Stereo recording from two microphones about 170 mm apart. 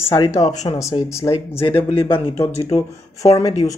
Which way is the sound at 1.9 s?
30° left (ahead or behind).